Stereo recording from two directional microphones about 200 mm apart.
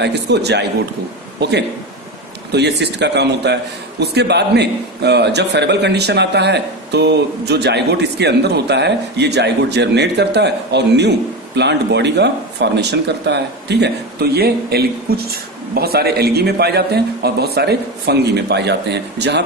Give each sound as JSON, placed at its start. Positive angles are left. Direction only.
{"t": 0.0, "sound": "a man's voice", "side_deg": -55}
{"t": 2.5, "sound": "a man's voice", "side_deg": -55}